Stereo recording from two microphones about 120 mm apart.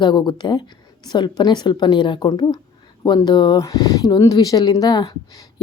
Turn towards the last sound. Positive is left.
turn(degrees=30)  # may be behind; listen again after turning